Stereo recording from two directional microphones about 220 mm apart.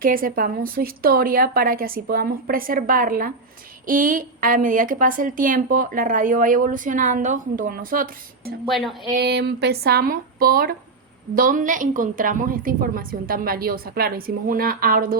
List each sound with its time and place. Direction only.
0.0 s a woman's voice: 40° right (ahead or behind)
8.6 s speech: centre (ahead or behind)
9.1 s a woman's voice: 45° right (ahead or behind)